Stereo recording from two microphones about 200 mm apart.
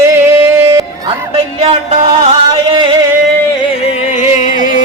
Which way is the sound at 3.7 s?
30° left (ahead or behind).